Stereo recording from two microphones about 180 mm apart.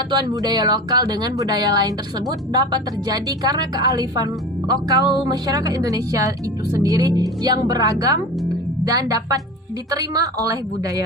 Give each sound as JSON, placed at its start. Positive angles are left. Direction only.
{"t": 0.1, "sound": "speech", "side_deg": -25}
{"t": 8.4, "sound": "music", "side_deg": -20}
{"t": 9.9, "sound": "speech", "side_deg": -20}